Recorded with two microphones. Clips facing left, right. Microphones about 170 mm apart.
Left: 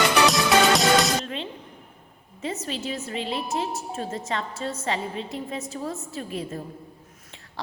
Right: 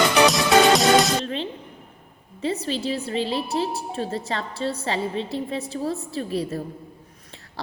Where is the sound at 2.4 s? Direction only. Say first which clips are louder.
Right 5 dB; 30° right (ahead or behind).